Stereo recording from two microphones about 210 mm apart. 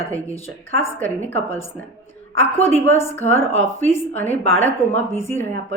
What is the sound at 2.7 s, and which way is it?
A woman's voice, 10° left (ahead or behind).